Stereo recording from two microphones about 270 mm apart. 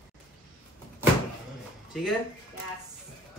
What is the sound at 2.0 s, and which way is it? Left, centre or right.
Speech, centre.